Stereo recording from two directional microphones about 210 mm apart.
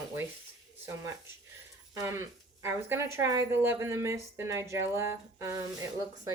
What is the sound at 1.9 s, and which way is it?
Speech, 15° right (ahead or behind).